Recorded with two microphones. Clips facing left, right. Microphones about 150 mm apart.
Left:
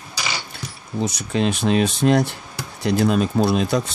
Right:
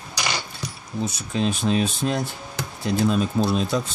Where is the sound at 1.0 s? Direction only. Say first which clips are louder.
Left 3 dB; 80° left.